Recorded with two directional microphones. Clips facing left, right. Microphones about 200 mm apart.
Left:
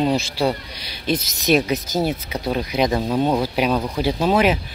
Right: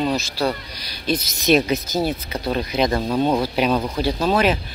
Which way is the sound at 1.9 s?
20° left (ahead or behind).